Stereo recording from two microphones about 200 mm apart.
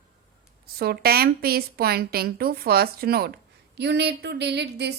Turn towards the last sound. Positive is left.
turn(degrees=-55)  # may be behind; listen again after turning